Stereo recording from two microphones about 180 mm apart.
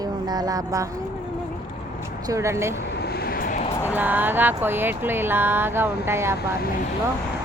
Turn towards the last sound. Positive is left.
turn(degrees=-15)  # may be behind; listen again after turning